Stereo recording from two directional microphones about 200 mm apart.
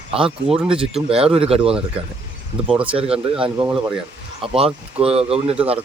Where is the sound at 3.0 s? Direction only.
30° right (ahead or behind).